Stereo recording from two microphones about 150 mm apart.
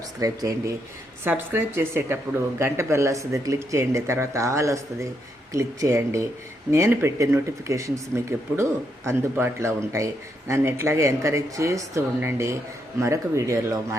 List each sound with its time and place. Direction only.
0.2 s a woman's voice: 20° right (ahead or behind)